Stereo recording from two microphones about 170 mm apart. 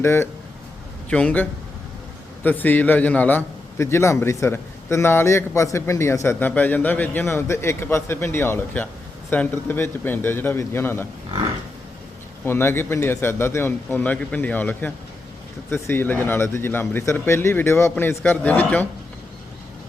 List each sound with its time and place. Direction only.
0.0 s a man's voice: 15° left (ahead or behind)
12.5 s a man's voice: 15° left (ahead or behind)